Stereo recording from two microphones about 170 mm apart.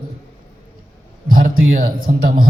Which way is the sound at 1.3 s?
55° right (ahead or behind).